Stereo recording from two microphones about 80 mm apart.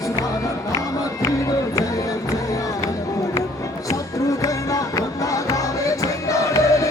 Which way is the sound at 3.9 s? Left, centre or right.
Left.